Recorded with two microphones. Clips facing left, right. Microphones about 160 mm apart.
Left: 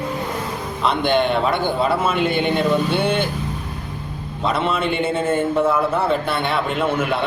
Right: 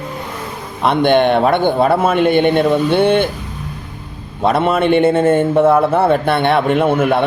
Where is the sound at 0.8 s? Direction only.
55° right (ahead or behind).